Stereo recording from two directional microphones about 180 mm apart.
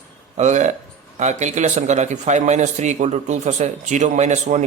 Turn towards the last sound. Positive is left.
turn(degrees=-40)  # may be behind; listen again after turning